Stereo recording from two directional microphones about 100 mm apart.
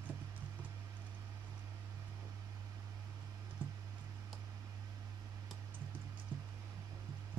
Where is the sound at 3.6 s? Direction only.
20° right (ahead or behind).